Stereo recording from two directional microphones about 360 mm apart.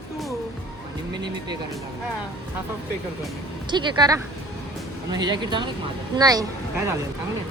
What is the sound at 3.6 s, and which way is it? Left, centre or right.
Speech, centre.